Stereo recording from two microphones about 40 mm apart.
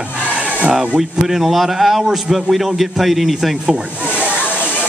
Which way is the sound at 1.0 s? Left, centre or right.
Centre.